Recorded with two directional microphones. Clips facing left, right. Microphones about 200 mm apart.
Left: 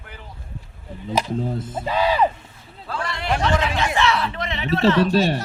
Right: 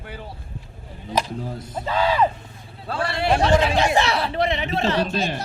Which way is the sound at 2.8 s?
30° right (ahead or behind).